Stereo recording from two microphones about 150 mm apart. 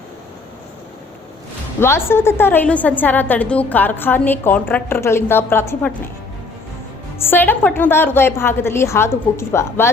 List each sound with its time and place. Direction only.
1.8 s a woman's voice: 15° left (ahead or behind)
7.2 s a woman's voice: 15° left (ahead or behind)